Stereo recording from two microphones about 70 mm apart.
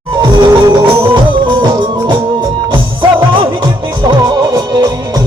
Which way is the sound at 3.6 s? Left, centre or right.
Right.